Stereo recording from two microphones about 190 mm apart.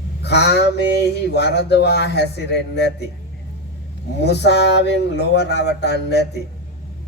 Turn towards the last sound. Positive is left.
turn(degrees=60)  # may be behind; listen again after turning